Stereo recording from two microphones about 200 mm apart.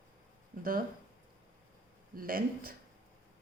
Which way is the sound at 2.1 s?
45° right (ahead or behind).